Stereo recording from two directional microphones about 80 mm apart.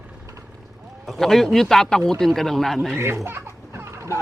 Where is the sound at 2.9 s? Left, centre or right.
Right.